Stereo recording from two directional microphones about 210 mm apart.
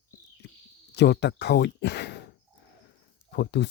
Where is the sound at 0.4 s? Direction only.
55° left (ahead or behind).